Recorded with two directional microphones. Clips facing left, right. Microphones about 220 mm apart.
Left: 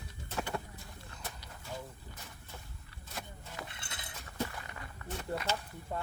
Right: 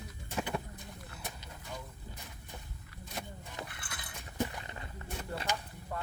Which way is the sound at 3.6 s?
25° left (ahead or behind).